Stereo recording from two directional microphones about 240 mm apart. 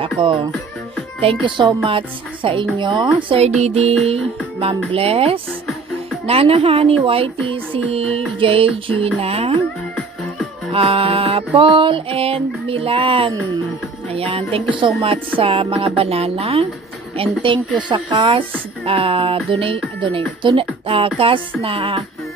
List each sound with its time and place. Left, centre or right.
0.2 s music: centre
10.7 s music: right